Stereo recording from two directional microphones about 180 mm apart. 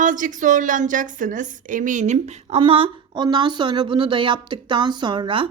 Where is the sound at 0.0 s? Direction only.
45° right (ahead or behind).